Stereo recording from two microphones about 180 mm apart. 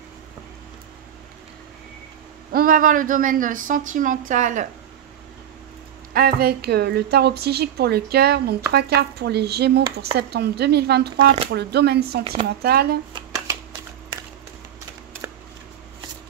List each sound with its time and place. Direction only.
2.5 s speech: 50° right (ahead or behind)
6.1 s a woman's voice: 55° right (ahead or behind)
13.1 s shuffling cards: 15° right (ahead or behind)
15.2 s scissors: 15° right (ahead or behind)